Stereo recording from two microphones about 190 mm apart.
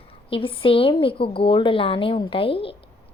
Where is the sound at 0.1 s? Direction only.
30° left (ahead or behind).